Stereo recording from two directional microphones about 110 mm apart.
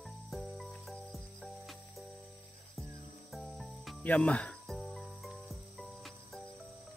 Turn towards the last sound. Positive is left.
turn(degrees=0)  # may be behind; listen again after turning